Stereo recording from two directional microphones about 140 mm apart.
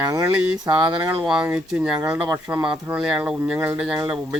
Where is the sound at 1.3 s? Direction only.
5° right (ahead or behind).